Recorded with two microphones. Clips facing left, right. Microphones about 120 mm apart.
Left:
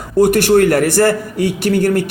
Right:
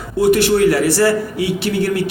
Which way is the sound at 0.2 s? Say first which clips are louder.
Left 2 dB; 50° left (ahead or behind).